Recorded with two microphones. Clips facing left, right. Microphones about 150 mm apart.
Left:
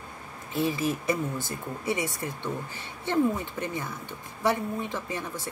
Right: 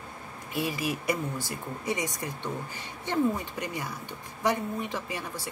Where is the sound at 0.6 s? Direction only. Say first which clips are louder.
Left 3 dB; 10° right (ahead or behind).